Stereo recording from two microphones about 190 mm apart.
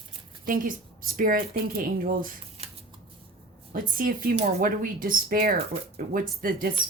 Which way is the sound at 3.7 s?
45° right (ahead or behind).